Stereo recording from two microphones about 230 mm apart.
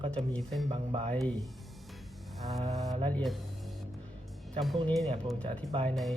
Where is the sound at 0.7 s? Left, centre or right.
Right.